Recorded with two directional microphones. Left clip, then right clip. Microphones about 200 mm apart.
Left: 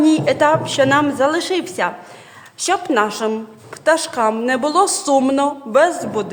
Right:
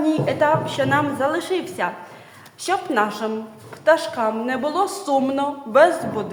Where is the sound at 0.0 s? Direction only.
50° left (ahead or behind).